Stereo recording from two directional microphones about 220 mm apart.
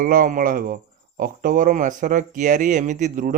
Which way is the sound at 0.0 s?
40° right (ahead or behind).